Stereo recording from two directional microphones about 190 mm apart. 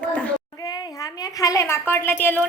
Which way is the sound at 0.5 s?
20° left (ahead or behind).